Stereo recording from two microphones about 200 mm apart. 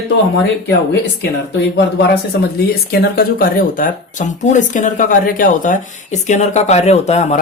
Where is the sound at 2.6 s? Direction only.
50° left (ahead or behind).